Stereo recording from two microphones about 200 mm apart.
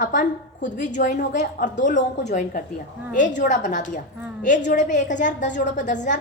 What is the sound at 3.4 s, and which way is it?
A woman's voice, 40° left (ahead or behind).